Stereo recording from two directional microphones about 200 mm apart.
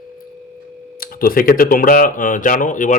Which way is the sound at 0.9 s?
45° left (ahead or behind).